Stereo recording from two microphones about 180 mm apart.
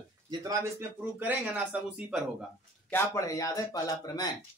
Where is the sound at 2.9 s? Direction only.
15° left (ahead or behind).